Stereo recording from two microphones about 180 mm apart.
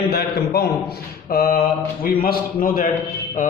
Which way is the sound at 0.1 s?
60° left (ahead or behind).